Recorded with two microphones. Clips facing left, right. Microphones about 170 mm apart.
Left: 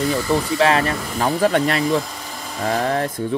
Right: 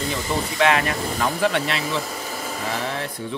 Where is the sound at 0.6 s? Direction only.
35° left (ahead or behind).